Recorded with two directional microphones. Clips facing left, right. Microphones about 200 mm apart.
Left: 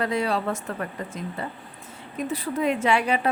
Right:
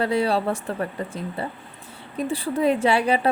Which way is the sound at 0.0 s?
30° right (ahead or behind).